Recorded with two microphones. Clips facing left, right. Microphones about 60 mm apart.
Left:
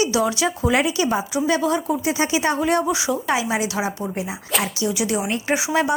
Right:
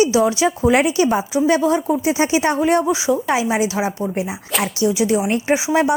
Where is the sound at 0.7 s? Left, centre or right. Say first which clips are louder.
Right 4 dB; right.